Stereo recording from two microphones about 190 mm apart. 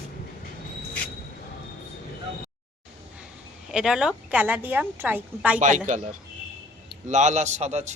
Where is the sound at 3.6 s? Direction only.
5° right (ahead or behind).